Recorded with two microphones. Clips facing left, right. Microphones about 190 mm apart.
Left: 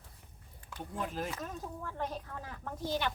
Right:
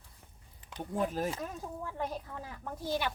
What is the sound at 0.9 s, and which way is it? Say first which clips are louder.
Speech: right 5 dB; 40° right (ahead or behind).